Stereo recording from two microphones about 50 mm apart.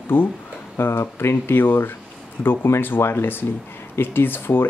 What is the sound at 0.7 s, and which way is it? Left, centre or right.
Speech, left.